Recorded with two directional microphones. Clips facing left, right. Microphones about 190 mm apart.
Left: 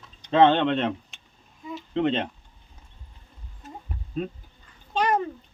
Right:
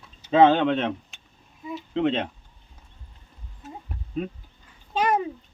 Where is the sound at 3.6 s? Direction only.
Centre (ahead or behind).